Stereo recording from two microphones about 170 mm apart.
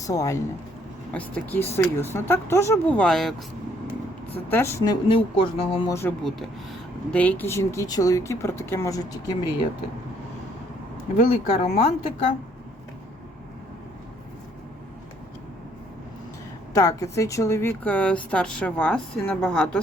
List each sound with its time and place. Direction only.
0.0 s speech: 20° left (ahead or behind)
1.1 s speech: 10° left (ahead or behind)
3.0 s speech: centre (ahead or behind)
4.5 s speech: 15° left (ahead or behind)
5.0 s speech: 30° left (ahead or behind)
5.9 s speech: 15° left (ahead or behind)
11.3 s speech: 40° left (ahead or behind)
16.7 s speech: 20° left (ahead or behind)